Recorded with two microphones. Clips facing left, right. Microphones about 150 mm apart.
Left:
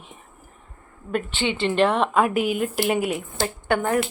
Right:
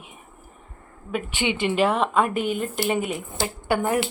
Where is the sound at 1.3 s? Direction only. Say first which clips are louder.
Right 2 dB; 15° right (ahead or behind).